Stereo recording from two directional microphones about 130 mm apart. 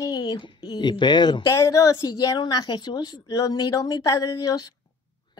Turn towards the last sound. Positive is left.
turn(degrees=30)  # may be behind; listen again after turning